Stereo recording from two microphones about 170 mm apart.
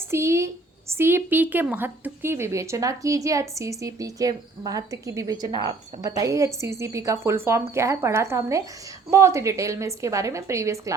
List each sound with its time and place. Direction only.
0.1 s a woman's voice: 15° right (ahead or behind)